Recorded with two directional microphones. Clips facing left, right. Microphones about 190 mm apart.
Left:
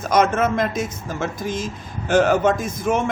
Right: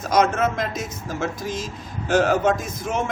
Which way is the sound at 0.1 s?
55° left (ahead or behind).